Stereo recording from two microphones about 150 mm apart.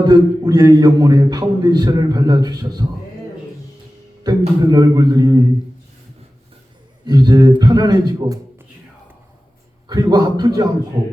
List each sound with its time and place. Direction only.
0.1 s a man's voice: 25° right (ahead or behind)
4.2 s a man's voice: 25° right (ahead or behind)
7.0 s a man's voice: 30° right (ahead or behind)
9.9 s a man's voice: 25° right (ahead or behind)